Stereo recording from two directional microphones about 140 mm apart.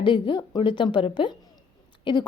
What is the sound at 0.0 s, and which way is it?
A woman's voice, 35° left (ahead or behind).